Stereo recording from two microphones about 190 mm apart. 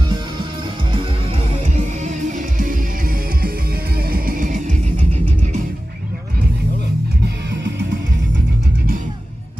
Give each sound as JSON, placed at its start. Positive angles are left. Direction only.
{"t": 1.3, "sound": "music", "side_deg": -35}